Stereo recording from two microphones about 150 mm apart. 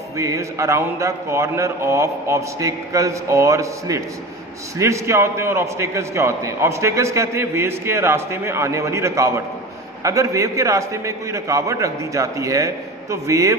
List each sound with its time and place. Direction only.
0.2 s a man's voice: 20° right (ahead or behind)